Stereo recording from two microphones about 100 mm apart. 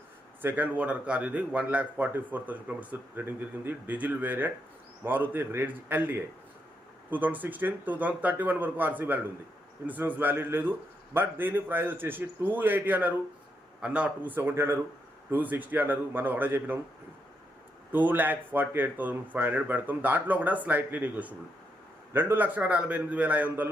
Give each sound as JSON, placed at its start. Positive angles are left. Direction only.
{"t": 0.4, "sound": "a man's voice", "side_deg": -15}
{"t": 17.9, "sound": "a man's voice", "side_deg": -20}